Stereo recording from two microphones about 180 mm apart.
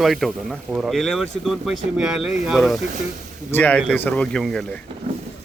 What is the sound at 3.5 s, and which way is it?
A man's voice, 10° left (ahead or behind).